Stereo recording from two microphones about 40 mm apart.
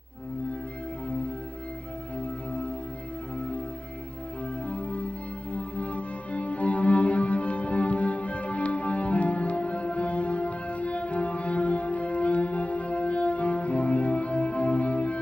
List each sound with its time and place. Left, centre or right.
4.6 s music: left